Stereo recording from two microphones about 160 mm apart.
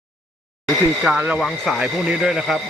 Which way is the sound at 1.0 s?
5° right (ahead or behind).